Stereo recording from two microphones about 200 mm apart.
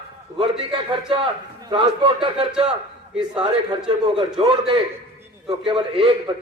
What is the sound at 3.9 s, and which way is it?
Speech, 25° right (ahead or behind).